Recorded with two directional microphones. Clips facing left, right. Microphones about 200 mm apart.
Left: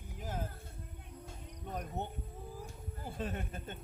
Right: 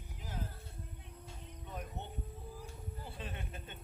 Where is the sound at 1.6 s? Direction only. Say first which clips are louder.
Left 6 dB; 45° left (ahead or behind).